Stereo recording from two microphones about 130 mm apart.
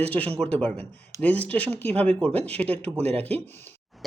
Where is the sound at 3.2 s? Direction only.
15° left (ahead or behind).